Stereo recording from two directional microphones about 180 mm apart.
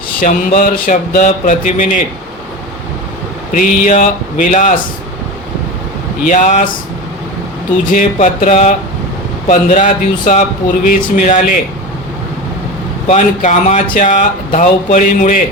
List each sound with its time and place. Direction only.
0.2 s speech: 50° left (ahead or behind)
3.5 s speech: 45° left (ahead or behind)
6.2 s speech: 45° left (ahead or behind)
7.9 s speech: 45° left (ahead or behind)
13.1 s speech: 45° left (ahead or behind)